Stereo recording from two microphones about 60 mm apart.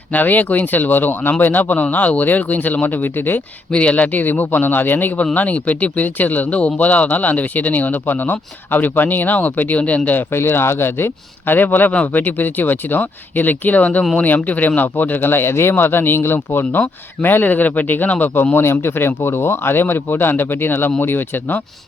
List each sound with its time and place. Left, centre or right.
0.1 s speech: left
3.7 s speech: centre
10.3 s speech: left
18.5 s speech: left